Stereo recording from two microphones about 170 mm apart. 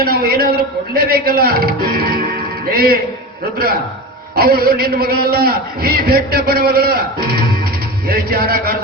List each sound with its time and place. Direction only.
0.0 s a man's voice: 60° right (ahead or behind)
4.4 s a man's voice: 60° right (ahead or behind)